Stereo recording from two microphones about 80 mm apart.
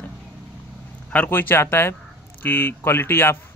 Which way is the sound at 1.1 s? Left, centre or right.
Left.